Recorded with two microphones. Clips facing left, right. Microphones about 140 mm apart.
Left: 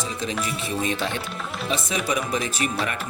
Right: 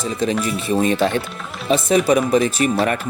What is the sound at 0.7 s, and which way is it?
Speech, 50° right (ahead or behind).